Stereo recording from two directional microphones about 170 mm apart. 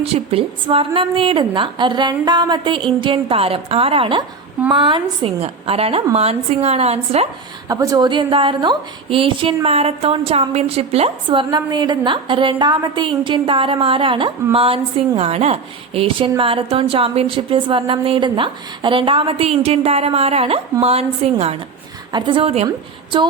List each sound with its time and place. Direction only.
0.0 s a woman's voice: 35° right (ahead or behind)
7.7 s a woman's voice: 20° right (ahead or behind)